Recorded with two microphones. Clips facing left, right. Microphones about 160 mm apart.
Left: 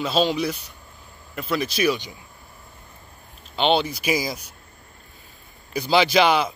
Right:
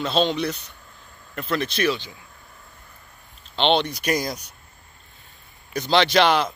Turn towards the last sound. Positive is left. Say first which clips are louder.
# even
turn(degrees=5)  # may be behind; listen again after turning